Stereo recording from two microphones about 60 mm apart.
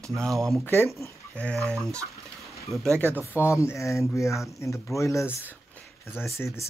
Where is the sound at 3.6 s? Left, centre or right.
Left.